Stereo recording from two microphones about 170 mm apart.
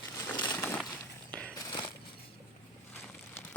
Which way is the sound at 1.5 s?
25° left (ahead or behind).